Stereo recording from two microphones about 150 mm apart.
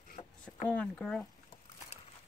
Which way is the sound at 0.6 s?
5° left (ahead or behind).